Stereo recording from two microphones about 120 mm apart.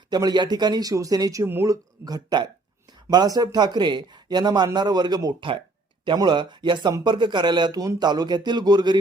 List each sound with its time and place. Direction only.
0.1 s a man's voice: 35° right (ahead or behind)